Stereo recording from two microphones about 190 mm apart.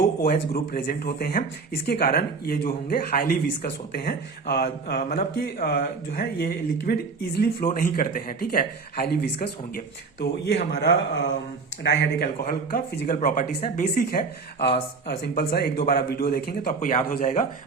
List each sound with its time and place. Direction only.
0.2 s a man's voice: 50° left (ahead or behind)